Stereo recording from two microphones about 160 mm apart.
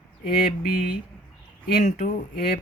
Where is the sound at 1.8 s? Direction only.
50° left (ahead or behind).